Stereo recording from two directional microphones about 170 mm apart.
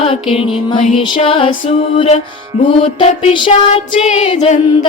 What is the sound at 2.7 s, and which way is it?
Music, 35° left (ahead or behind).